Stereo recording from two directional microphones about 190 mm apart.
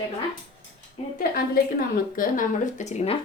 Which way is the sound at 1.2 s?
50° left (ahead or behind).